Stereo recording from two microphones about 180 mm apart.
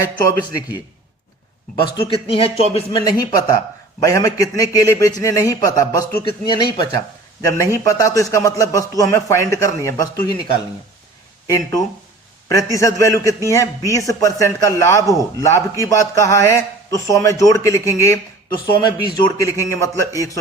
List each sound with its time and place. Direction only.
1.8 s a man's voice: 30° left (ahead or behind)